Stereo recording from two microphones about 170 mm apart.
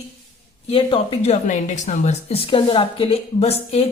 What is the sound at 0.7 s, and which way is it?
Speech, 30° left (ahead or behind).